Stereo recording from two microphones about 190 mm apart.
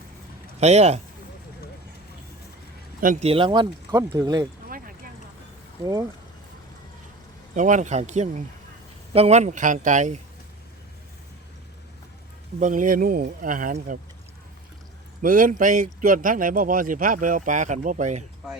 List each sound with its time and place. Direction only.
0.6 s speech: 35° right (ahead or behind)
3.0 s speech: 40° right (ahead or behind); by 4.4 s 20° right (ahead or behind)
5.8 s speech: 20° right (ahead or behind)
7.5 s speech: 40° right (ahead or behind)
12.5 s a man's voice: 45° right (ahead or behind)
15.2 s a man's voice: 45° right (ahead or behind)